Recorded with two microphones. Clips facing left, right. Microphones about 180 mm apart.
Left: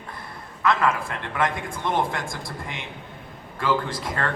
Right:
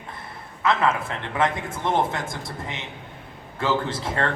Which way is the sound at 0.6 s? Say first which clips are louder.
Even; 25° right (ahead or behind).